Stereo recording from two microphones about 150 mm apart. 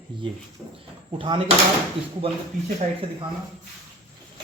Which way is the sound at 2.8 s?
55° right (ahead or behind).